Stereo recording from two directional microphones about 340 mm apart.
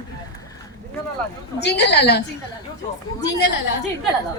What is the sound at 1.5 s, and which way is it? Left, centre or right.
Speech, left.